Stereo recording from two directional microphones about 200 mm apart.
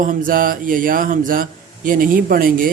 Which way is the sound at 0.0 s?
40° right (ahead or behind).